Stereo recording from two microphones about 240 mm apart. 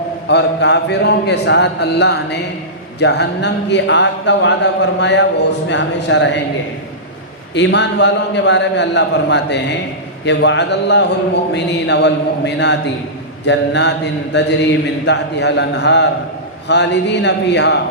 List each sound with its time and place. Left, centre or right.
0.3 s speech: left
7.5 s speech: left